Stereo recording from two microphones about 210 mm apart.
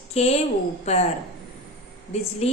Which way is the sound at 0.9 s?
30° left (ahead or behind).